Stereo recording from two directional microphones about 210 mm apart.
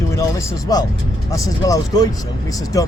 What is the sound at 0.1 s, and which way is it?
Speech, 15° left (ahead or behind).